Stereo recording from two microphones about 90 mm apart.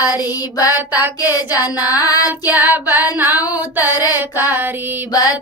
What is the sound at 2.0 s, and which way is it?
Music, 45° left (ahead or behind).